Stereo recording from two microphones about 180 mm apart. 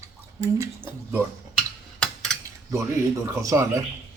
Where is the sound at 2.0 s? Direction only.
5° left (ahead or behind).